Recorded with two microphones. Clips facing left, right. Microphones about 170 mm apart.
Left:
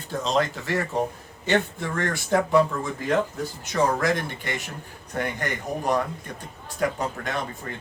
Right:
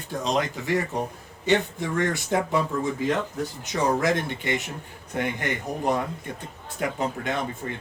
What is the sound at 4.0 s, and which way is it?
Speech, 20° right (ahead or behind).